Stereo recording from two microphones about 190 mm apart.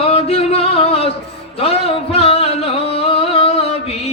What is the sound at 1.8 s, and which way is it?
Music, 30° left (ahead or behind).